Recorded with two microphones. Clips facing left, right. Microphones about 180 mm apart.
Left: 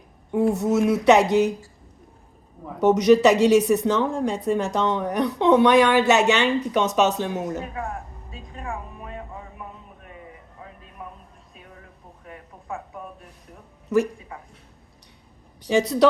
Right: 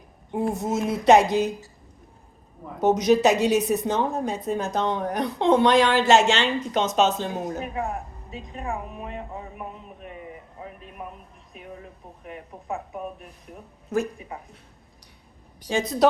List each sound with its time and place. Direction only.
0.3 s a woman's voice: 75° left (ahead or behind)
2.8 s a woman's voice: 75° left (ahead or behind)
7.6 s a sound: 20° right (ahead or behind)
14.2 s a man's voice: 20° right (ahead or behind)
15.7 s speech: 80° left